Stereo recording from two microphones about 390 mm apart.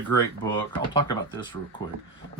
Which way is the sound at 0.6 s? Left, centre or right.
Centre.